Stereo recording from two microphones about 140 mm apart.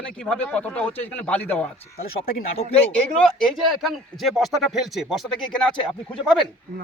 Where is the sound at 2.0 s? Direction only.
90° left.